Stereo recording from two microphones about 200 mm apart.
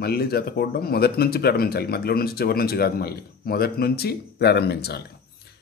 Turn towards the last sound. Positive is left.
turn(degrees=55)  # may be behind; listen again after turning